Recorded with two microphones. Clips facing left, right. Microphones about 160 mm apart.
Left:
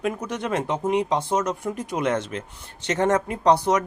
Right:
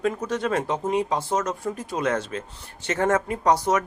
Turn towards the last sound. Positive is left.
turn(degrees=25)  # may be behind; listen again after turning